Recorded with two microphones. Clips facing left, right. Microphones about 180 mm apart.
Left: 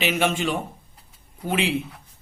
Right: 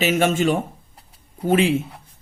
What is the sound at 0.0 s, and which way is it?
Speech, 45° right (ahead or behind).